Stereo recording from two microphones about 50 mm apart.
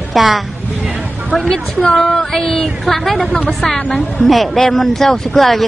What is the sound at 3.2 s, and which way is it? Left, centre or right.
Speech, left.